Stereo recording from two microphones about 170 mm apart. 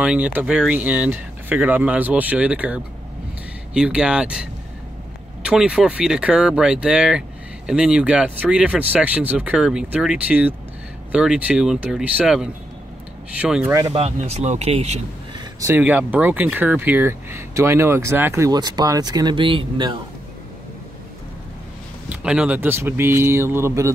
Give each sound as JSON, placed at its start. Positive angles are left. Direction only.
{"t": 0.0, "sound": "speech", "side_deg": -10}
{"t": 13.9, "sound": "speech", "side_deg": -35}
{"t": 15.3, "sound": "speech", "side_deg": -15}
{"t": 22.1, "sound": "speech", "side_deg": -5}